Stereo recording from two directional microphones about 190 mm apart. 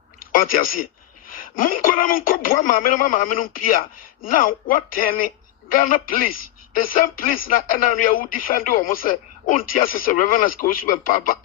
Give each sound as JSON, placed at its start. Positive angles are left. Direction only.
{"t": 0.2, "sound": "speech", "side_deg": 50}